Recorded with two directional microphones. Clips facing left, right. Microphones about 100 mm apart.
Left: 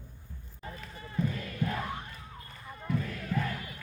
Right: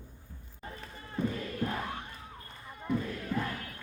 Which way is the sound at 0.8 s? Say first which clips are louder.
Even; 25° right (ahead or behind).